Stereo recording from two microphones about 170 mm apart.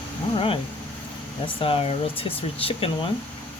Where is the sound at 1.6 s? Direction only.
30° left (ahead or behind).